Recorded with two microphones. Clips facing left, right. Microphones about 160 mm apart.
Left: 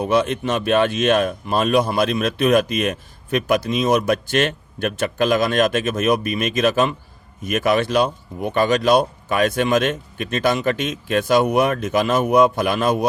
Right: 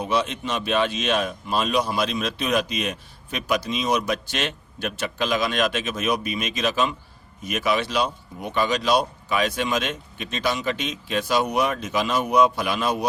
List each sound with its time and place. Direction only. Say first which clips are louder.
0.0 s speech: left 6 dB; 50° left (ahead or behind)